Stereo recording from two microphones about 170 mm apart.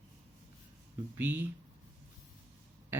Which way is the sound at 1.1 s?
10° right (ahead or behind).